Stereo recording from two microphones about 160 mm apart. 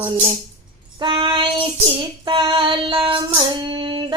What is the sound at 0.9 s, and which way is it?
Child singing, 30° right (ahead or behind).